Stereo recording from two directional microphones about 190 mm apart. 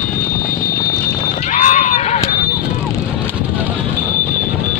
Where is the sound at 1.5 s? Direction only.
40° left (ahead or behind).